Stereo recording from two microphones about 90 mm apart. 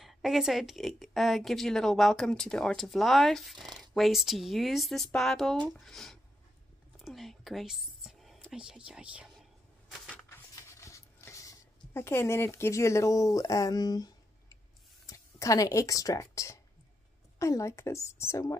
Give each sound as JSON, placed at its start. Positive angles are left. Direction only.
{"t": 0.0, "sound": "a woman's voice", "side_deg": 0}
{"t": 7.0, "sound": "whispering", "side_deg": 0}
{"t": 8.5, "sound": "speech", "side_deg": -5}
{"t": 10.5, "sound": "writing", "side_deg": 35}
{"t": 15.0, "sound": "a woman's voice", "side_deg": 40}